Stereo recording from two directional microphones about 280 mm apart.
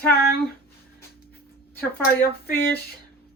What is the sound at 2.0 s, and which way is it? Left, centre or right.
Speech, left.